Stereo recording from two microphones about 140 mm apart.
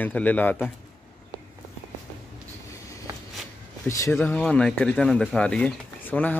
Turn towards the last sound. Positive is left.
turn(degrees=10)  # may be behind; listen again after turning